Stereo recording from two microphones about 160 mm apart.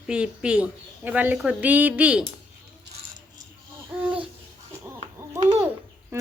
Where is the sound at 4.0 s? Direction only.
10° right (ahead or behind).